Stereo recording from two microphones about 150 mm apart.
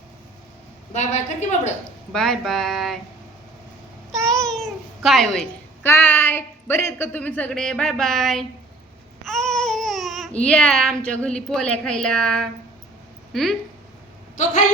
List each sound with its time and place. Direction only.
0.9 s speech: 50° left (ahead or behind)
2.1 s a woman's voice: 5° left (ahead or behind)
4.2 s babbling: 5° left (ahead or behind)
4.6 s cat: centre (ahead or behind)
5.8 s a woman's voice: 15° left (ahead or behind)
9.2 s a sound: 5° left (ahead or behind)
10.4 s a woman's voice: 5° left (ahead or behind)